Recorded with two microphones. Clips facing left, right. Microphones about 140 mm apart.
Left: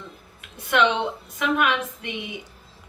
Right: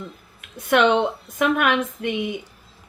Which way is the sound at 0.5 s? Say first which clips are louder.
Right 4 dB; 55° right (ahead or behind).